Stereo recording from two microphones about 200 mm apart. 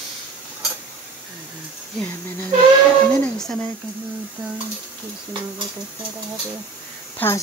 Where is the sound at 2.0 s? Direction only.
10° left (ahead or behind).